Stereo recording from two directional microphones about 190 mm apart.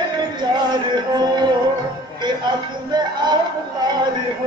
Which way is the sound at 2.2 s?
20° right (ahead or behind).